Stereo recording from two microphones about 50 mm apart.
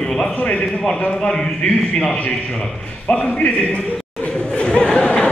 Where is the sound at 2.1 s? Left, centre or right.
Left.